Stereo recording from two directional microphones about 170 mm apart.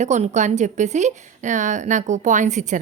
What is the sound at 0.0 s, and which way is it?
A woman's voice, 45° right (ahead or behind).